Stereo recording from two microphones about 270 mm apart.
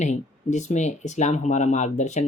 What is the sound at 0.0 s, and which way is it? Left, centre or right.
Speech, left.